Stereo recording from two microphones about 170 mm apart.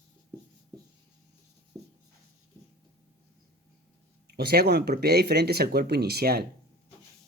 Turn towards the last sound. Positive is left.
turn(degrees=-65)  # may be behind; listen again after turning